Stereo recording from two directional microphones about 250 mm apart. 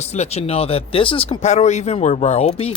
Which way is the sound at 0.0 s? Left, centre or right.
Left.